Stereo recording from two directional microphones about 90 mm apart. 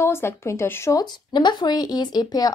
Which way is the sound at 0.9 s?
55° left (ahead or behind).